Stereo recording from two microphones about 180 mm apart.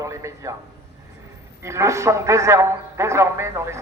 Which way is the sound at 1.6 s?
15° right (ahead or behind).